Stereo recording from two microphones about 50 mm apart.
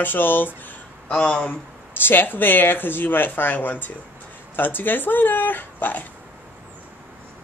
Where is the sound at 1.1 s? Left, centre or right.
Left.